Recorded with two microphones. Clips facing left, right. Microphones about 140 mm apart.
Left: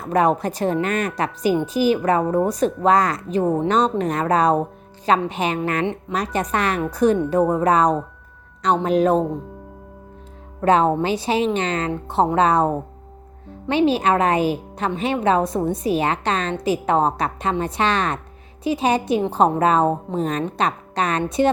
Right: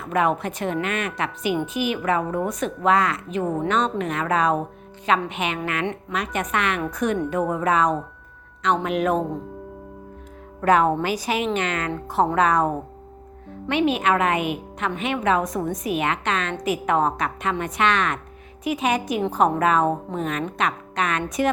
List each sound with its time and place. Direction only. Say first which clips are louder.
0.0 s a woman's voice: left 4 dB; 35° left (ahead or behind)
5.8 s a woman's voice: left 3 dB; 20° left (ahead or behind)
6.1 s a woman's voice: left 3 dB; 35° left (ahead or behind)
10.6 s a woman's voice: left 2 dB; 30° left (ahead or behind)